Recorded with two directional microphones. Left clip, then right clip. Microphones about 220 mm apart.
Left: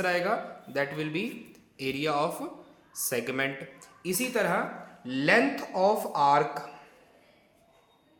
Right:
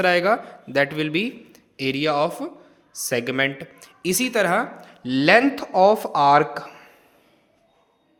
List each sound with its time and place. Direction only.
0.0 s speech: 40° right (ahead or behind)